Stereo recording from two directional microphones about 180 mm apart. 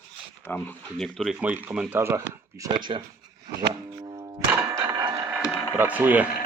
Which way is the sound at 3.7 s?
25° right (ahead or behind).